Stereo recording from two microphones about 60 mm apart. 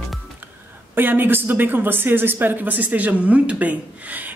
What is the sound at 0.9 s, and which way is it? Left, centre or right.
Speech, right.